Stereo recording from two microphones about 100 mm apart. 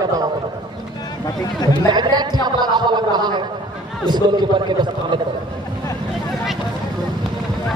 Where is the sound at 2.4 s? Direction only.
45° right (ahead or behind).